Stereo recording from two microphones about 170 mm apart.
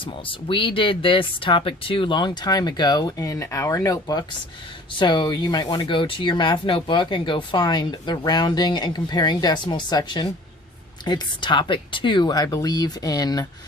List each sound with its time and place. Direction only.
0.0 s speech: 30° left (ahead or behind)